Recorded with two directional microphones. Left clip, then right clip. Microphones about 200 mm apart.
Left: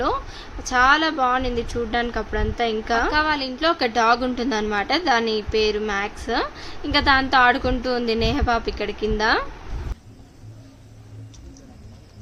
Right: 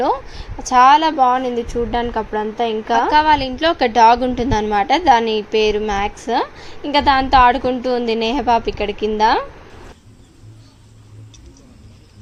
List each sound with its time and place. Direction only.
0.0 s a woman's voice: 20° right (ahead or behind)